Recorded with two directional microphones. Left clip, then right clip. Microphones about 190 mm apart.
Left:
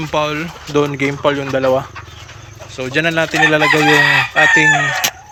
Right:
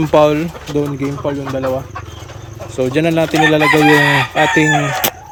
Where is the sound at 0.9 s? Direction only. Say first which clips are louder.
Left 4 dB; 55° left (ahead or behind).